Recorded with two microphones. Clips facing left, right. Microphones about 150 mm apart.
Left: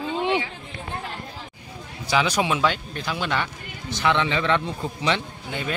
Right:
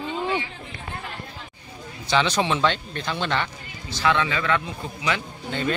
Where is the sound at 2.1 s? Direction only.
10° left (ahead or behind).